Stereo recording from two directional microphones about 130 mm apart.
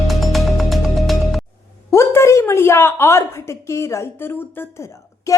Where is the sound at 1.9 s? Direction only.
20° left (ahead or behind).